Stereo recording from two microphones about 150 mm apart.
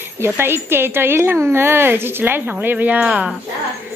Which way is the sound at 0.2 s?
15° right (ahead or behind).